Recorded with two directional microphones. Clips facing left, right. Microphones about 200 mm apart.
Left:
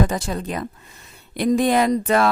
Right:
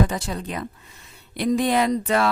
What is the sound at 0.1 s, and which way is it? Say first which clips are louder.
Speech: left 3 dB; 45° left (ahead or behind).